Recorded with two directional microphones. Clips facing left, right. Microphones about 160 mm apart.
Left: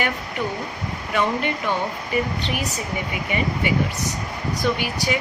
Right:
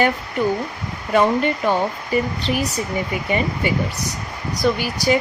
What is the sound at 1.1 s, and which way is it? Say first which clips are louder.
Speech: right 6 dB; 40° right (ahead or behind).